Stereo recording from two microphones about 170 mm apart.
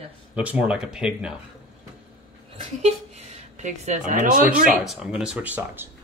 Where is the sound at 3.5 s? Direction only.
45° right (ahead or behind).